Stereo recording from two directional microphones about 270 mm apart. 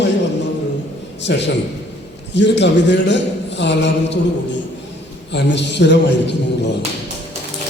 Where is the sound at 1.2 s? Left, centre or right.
Left.